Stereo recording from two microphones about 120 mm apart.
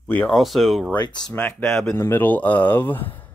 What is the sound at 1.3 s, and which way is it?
Speech, 10° left (ahead or behind).